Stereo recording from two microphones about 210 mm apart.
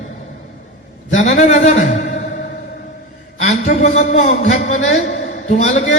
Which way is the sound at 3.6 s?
35° left (ahead or behind).